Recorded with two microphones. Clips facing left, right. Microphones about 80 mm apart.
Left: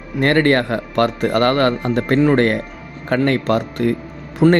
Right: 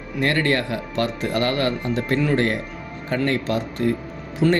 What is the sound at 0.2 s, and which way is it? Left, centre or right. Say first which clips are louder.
Speech: left 6 dB; left.